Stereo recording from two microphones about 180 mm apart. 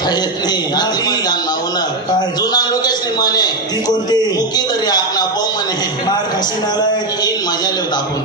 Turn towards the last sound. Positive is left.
turn(degrees=20)  # may be behind; listen again after turning